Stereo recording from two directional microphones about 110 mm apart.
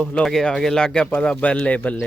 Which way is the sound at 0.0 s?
5° left (ahead or behind).